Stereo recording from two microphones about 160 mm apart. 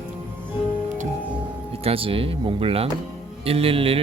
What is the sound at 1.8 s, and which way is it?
Speech, 35° right (ahead or behind).